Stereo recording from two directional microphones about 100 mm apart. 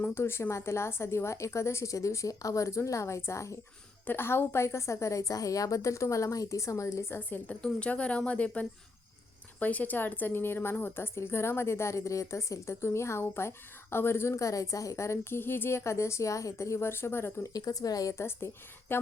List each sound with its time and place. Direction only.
0.1 s a woman's voice: 25° left (ahead or behind)
17.5 s a woman's voice: 35° left (ahead or behind)
18.2 s a woman's voice: 25° left (ahead or behind)